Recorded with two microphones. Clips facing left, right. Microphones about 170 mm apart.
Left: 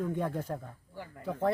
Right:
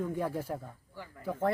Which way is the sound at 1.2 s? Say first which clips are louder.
Left 1 dB; centre (ahead or behind).